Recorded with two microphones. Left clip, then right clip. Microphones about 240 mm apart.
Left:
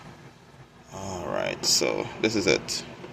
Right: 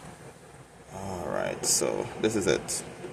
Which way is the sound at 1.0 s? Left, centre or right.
Centre.